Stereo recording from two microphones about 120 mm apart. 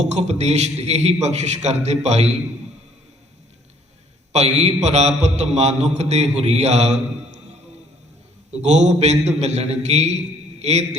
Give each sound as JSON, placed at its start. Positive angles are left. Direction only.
{"t": 0.2, "sound": "a man's voice", "side_deg": -65}
{"t": 4.3, "sound": "a man's voice", "side_deg": -60}
{"t": 8.6, "sound": "a man's voice", "side_deg": -70}